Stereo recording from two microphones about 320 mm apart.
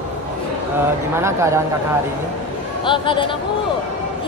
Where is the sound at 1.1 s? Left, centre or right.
Centre.